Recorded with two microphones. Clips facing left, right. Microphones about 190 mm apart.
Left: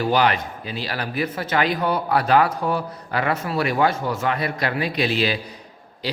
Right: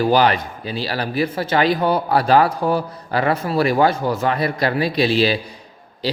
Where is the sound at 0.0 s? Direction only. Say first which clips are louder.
Right 4 dB; 35° right (ahead or behind).